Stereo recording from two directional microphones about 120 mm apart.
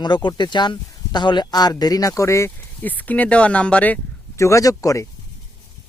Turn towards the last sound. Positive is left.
turn(degrees=25)  # may be behind; listen again after turning